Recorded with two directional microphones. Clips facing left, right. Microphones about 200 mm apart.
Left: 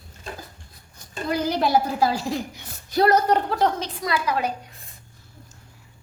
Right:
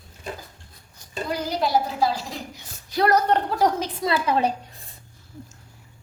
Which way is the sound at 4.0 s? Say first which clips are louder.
Right 3 dB; 25° right (ahead or behind).